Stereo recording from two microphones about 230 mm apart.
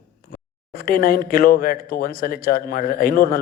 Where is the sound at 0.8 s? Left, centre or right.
Left.